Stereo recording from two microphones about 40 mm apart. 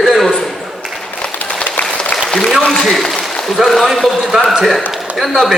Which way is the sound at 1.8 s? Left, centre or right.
Left.